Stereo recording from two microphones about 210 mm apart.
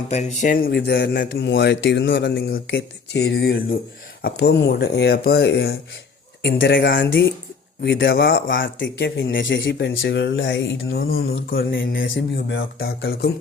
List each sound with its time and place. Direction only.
0.1 s speech: 35° left (ahead or behind)